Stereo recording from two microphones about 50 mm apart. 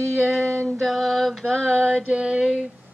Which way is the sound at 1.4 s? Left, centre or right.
Centre.